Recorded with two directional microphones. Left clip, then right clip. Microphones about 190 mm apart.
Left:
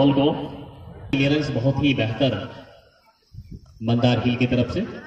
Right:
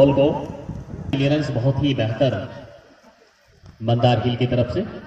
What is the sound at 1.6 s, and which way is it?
Speech, 25° left (ahead or behind).